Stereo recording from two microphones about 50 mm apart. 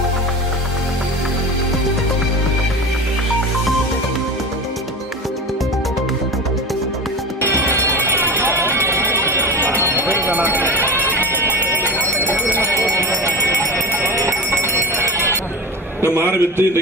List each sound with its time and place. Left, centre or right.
7.4 s music: right
10.4 s a sound: right
11.3 s clip-clop: right
12.7 s fire alarm: right
14.6 s bell: right
16.3 s a man's voice: left